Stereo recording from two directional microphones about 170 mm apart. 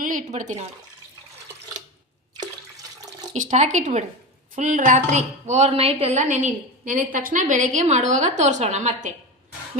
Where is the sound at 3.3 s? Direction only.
45° right (ahead or behind).